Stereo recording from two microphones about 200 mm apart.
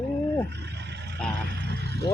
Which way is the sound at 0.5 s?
60° right (ahead or behind).